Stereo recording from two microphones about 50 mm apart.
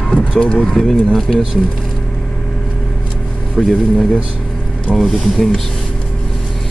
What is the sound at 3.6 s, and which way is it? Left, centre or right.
Speech, centre.